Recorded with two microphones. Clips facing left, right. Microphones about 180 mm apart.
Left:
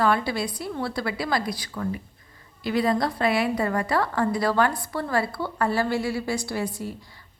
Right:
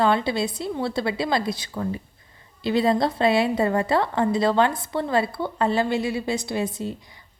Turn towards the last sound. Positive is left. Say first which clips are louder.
# right 3 dB
turn(degrees=-20)  # may be behind; listen again after turning